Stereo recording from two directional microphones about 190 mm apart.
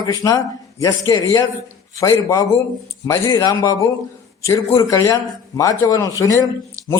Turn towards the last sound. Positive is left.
turn(degrees=15)  # may be behind; listen again after turning